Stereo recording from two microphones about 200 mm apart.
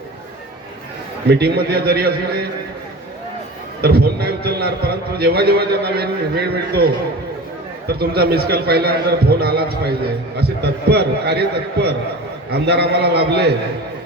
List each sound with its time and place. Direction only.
1.3 s a man's voice: 55° right (ahead or behind)
3.8 s a man's voice: 50° right (ahead or behind)
7.9 s a man's voice: 50° right (ahead or behind)